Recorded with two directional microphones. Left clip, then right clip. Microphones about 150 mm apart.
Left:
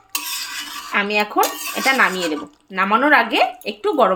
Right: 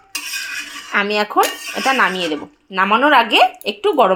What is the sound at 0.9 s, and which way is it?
Speech, 10° right (ahead or behind).